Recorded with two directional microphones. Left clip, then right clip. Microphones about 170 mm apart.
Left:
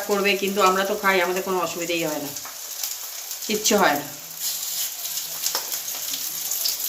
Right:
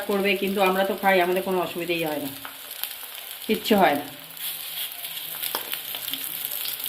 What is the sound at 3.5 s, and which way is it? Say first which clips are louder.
Speech: even; 40° right (ahead or behind).